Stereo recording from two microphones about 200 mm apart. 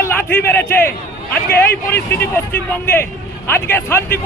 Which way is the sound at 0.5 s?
10° left (ahead or behind).